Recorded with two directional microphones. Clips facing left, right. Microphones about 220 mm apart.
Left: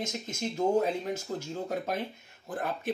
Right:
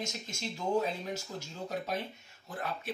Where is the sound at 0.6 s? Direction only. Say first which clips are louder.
Left 5 dB; 50° left (ahead or behind).